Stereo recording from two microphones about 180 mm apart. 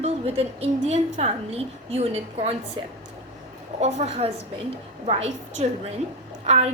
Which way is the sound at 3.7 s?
35° right (ahead or behind).